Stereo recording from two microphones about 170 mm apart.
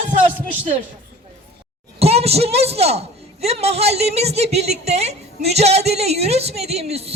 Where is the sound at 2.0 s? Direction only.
35° right (ahead or behind).